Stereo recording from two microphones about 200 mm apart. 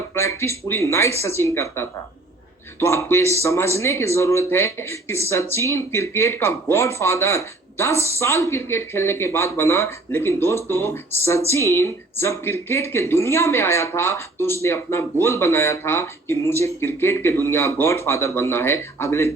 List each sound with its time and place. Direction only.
0.1 s speech: 15° left (ahead or behind)